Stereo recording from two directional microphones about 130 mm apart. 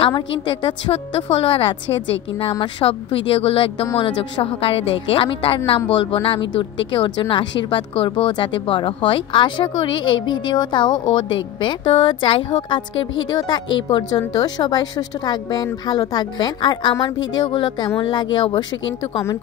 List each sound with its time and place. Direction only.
0.0 s a woman's voice: 40° left (ahead or behind)
2.8 s a woman's voice: 45° left (ahead or behind)